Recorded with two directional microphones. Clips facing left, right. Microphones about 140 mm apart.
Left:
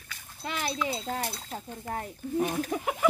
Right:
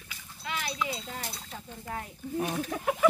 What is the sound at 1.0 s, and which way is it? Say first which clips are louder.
Speech: left 7 dB; 45° left (ahead or behind).